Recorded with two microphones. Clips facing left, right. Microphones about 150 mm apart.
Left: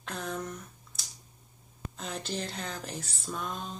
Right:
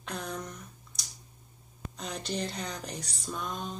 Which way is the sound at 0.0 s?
Centre (ahead or behind).